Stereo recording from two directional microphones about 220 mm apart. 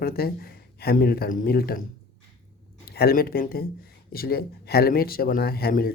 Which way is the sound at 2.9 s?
45° left (ahead or behind).